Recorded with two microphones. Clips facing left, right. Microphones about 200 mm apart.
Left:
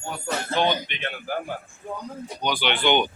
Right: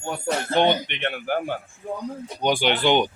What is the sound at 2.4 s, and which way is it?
Speech, 50° right (ahead or behind).